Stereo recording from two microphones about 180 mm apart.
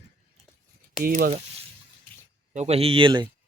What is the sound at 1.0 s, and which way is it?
Speech, 55° right (ahead or behind).